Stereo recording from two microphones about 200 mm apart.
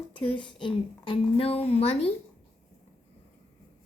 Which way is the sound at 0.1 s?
25° left (ahead or behind).